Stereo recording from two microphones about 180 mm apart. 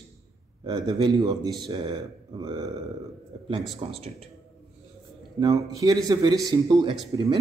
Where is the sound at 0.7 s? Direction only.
20° right (ahead or behind).